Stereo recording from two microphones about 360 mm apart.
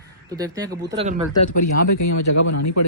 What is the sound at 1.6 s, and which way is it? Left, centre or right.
Speech, left.